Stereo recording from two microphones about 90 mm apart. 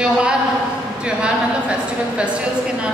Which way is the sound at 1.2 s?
10° right (ahead or behind).